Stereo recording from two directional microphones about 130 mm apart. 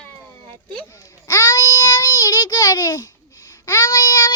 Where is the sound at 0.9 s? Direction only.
25° left (ahead or behind).